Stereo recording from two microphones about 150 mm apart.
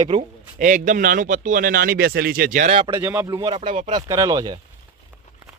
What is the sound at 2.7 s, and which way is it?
Speech, 35° right (ahead or behind).